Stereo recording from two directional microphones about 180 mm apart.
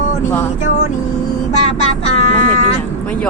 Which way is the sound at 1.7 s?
35° left (ahead or behind).